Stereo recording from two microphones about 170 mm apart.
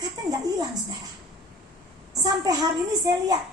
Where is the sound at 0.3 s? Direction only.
20° right (ahead or behind).